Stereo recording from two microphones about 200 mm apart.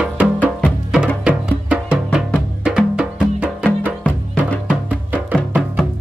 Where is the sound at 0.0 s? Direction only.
5° right (ahead or behind).